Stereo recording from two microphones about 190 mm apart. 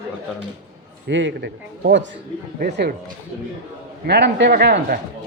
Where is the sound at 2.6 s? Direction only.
50° right (ahead or behind).